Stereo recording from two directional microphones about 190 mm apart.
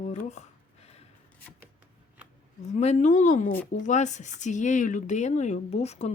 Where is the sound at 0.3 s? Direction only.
35° left (ahead or behind).